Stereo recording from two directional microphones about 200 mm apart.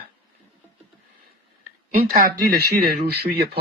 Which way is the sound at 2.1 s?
45° right (ahead or behind).